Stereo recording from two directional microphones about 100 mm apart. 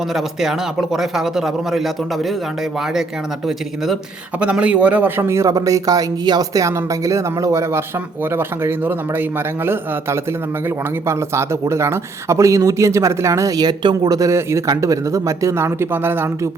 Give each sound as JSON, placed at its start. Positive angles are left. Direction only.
{"t": 0.1, "sound": "a man's voice", "side_deg": -5}
{"t": 4.4, "sound": "a man's voice", "side_deg": -10}
{"t": 8.4, "sound": "speech", "side_deg": -20}
{"t": 11.0, "sound": "a man's voice", "side_deg": -30}
{"t": 14.2, "sound": "speech", "side_deg": -30}